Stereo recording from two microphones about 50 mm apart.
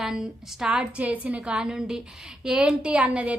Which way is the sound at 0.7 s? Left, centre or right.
Right.